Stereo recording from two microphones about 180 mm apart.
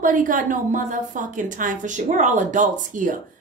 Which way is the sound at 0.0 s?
45° right (ahead or behind).